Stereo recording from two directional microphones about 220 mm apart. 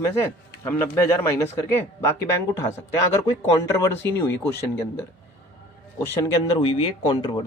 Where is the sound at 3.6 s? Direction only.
15° left (ahead or behind).